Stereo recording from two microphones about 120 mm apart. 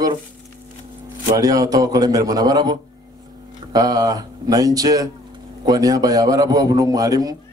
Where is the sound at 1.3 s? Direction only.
30° right (ahead or behind).